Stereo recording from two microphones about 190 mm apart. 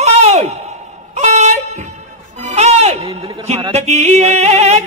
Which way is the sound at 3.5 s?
30° right (ahead or behind).